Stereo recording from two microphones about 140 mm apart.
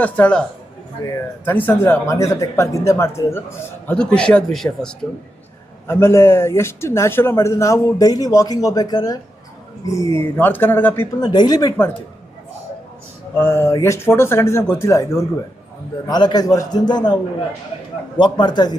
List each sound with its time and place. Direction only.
0.0 s speech: 10° left (ahead or behind)
1.5 s speech: 15° left (ahead or behind)
3.8 s speech: 5° left (ahead or behind)
5.9 s speech: 20° left (ahead or behind)
11.2 s speech: 30° left (ahead or behind)
13.4 s a man's voice: 15° left (ahead or behind)
18.2 s a man's voice: 30° left (ahead or behind)